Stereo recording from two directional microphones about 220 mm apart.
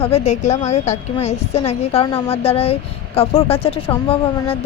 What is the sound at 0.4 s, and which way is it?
Speech, 30° left (ahead or behind).